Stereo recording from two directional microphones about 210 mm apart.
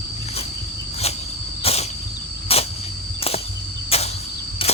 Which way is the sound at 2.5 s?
30° left (ahead or behind).